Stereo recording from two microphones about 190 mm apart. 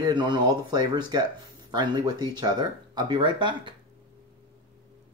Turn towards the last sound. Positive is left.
turn(degrees=-25)  # may be behind; listen again after turning